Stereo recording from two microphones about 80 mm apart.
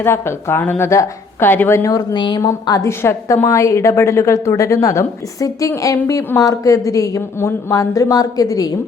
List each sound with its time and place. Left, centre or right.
0.0 s a woman's voice: left
0.9 s a woman's voice: left
1.5 s a woman's voice: left
1.8 s a woman's voice: left
2.1 s a woman's voice: left
2.8 s a woman's voice: left